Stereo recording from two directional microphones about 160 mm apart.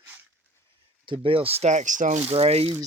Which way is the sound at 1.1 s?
35° right (ahead or behind).